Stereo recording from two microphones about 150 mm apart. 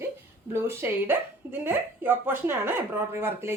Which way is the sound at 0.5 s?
15° right (ahead or behind).